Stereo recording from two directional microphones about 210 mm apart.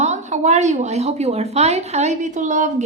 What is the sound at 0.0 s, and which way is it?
A woman's voice, 35° right (ahead or behind).